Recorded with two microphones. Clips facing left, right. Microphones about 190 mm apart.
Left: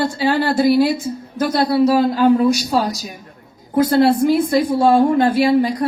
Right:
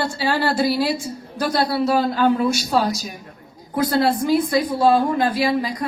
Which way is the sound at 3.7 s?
25° left (ahead or behind).